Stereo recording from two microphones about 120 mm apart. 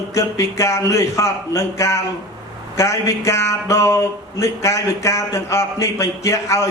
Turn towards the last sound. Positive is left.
turn(degrees=25)  # may be behind; listen again after turning